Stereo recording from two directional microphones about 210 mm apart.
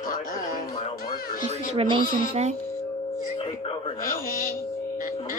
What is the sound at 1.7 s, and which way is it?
Speech, 25° right (ahead or behind).